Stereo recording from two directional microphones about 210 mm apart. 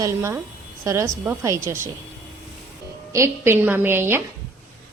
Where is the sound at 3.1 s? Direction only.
10° right (ahead or behind).